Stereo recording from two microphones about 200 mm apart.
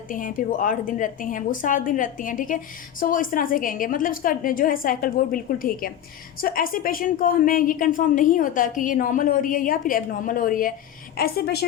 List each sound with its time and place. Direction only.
0.1 s a woman's voice: 40° left (ahead or behind)